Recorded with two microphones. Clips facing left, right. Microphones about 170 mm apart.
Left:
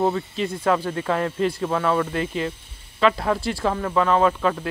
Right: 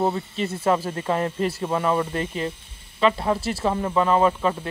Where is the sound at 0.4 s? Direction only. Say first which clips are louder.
Right 1 dB; 5° right (ahead or behind).